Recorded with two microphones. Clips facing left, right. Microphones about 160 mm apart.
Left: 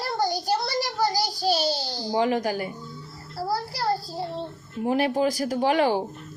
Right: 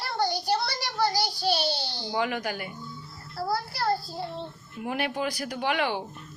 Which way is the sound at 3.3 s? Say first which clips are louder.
Left 1 dB; 35° left (ahead or behind).